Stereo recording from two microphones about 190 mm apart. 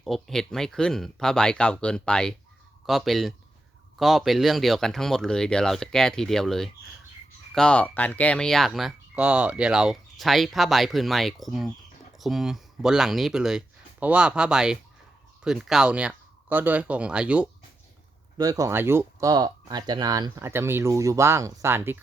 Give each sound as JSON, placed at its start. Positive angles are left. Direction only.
{"t": 0.0, "sound": "speech", "side_deg": 0}
{"t": 18.3, "sound": "speech", "side_deg": -20}